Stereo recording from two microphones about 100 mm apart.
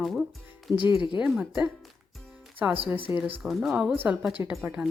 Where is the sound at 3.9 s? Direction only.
15° right (ahead or behind).